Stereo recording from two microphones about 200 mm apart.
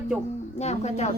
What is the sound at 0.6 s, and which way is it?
Speech, 35° left (ahead or behind).